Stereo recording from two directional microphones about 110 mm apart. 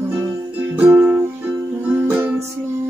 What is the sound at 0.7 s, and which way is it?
Music, 15° right (ahead or behind).